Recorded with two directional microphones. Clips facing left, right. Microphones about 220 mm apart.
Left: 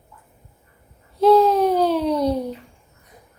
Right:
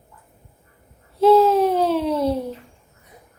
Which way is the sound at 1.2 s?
5° right (ahead or behind).